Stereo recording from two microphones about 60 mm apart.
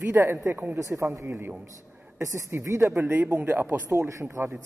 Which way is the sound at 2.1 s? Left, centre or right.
Right.